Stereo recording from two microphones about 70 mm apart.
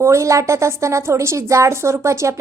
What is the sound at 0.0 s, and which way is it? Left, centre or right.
A woman's voice, right.